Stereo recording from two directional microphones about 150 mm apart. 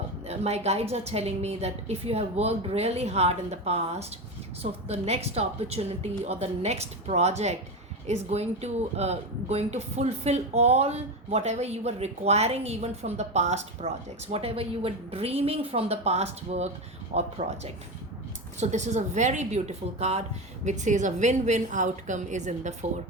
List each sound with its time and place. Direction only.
0.3 s speech: 45° right (ahead or behind)